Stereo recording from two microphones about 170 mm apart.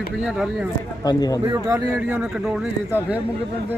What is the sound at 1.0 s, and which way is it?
Speech, 25° left (ahead or behind).